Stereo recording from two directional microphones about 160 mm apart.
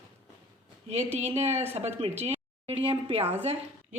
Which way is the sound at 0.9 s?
45° right (ahead or behind).